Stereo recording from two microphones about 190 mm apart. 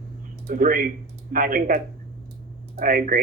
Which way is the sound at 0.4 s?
45° right (ahead or behind).